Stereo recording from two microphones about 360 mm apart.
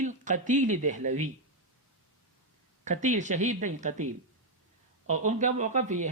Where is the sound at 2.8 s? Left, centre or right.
Centre.